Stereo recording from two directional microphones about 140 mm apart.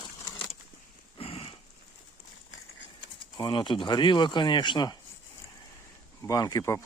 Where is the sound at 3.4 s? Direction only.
35° left (ahead or behind).